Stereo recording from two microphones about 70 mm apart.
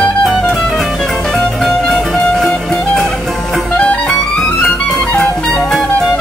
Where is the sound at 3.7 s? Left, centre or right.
Centre.